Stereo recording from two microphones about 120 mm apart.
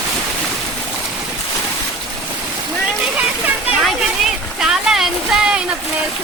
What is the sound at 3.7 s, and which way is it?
Speech, centre (ahead or behind).